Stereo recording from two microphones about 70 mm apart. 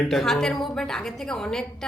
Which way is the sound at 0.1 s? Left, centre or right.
Centre.